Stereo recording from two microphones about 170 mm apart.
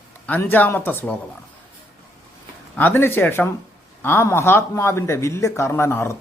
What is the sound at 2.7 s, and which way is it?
Speech, 10° left (ahead or behind).